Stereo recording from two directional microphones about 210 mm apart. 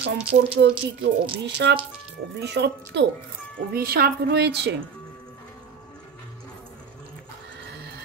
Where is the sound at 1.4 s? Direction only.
55° right (ahead or behind).